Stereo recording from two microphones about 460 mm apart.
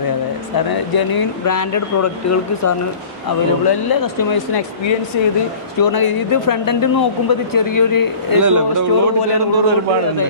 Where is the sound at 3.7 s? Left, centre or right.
Left.